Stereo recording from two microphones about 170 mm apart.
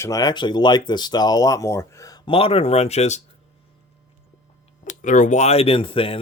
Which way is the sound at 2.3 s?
35° left (ahead or behind).